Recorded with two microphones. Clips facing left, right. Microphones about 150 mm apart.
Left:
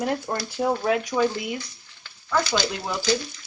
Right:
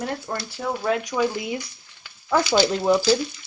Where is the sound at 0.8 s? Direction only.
5° left (ahead or behind).